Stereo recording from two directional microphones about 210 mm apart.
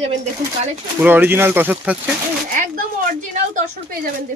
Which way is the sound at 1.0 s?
10° right (ahead or behind).